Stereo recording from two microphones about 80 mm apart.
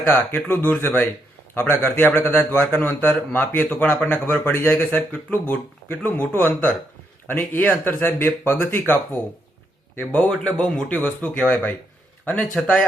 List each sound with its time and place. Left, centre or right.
0.0 s a man's voice: left
10.2 s a man's voice: centre